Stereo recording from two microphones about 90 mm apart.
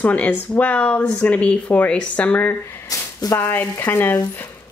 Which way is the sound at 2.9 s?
40° left (ahead or behind).